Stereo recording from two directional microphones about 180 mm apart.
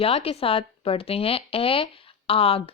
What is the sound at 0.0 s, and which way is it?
A woman's voice, 35° left (ahead or behind).